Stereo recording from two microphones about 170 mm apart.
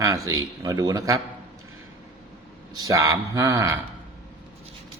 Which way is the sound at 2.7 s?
20° right (ahead or behind).